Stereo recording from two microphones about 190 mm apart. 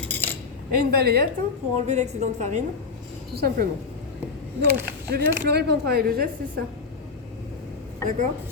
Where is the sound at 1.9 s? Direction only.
35° right (ahead or behind).